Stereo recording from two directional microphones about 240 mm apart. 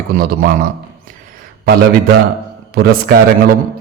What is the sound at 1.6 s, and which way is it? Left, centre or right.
A man's voice, right.